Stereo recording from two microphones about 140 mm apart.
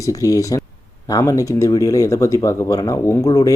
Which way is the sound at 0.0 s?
25° left (ahead or behind).